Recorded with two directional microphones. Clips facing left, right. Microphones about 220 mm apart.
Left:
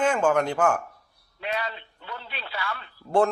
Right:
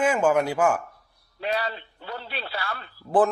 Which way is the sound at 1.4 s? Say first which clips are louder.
Right 3 dB; 35° right (ahead or behind).